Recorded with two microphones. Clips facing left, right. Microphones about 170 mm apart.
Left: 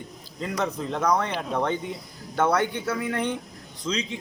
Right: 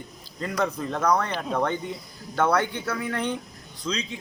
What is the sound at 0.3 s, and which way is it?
Speech, 20° left (ahead or behind).